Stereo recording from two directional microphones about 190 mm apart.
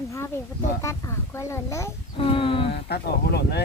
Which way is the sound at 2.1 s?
30° left (ahead or behind).